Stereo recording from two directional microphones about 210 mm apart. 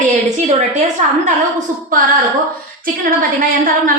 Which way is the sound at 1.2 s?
40° right (ahead or behind).